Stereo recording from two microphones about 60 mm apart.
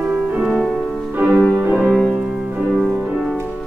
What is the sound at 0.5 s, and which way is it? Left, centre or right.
Music, centre.